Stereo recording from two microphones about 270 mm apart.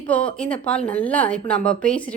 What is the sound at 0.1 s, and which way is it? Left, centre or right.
A woman's voice, centre.